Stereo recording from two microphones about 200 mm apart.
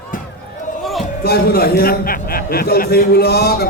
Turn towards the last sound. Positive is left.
turn(degrees=50)  # may be behind; listen again after turning